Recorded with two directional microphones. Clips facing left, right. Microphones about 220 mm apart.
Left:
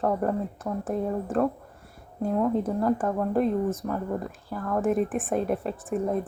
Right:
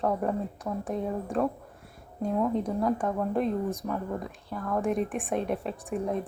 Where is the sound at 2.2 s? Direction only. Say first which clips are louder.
Left 2 dB; centre (ahead or behind).